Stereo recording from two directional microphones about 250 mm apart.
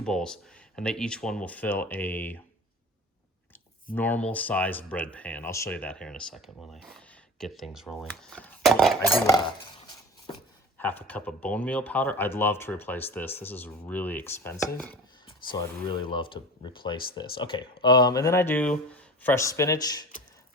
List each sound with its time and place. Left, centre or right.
0.0 s speech: centre
3.9 s speech: centre
10.8 s speech: centre
15.3 s speech: centre